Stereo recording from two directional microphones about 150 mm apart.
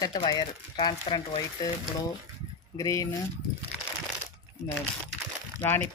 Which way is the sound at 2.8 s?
20° left (ahead or behind).